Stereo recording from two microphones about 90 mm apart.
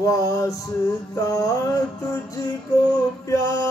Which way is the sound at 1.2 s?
40° left (ahead or behind).